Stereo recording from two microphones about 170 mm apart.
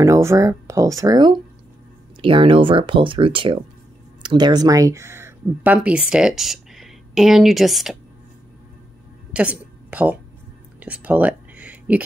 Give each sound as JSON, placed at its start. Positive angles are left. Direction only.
{"t": 0.0, "sound": "speech", "side_deg": -15}
{"t": 9.3, "sound": "a woman's voice", "side_deg": -10}
{"t": 10.8, "sound": "a sound", "side_deg": -10}